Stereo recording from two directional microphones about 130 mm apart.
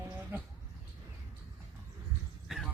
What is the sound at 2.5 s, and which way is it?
Speech, centre (ahead or behind).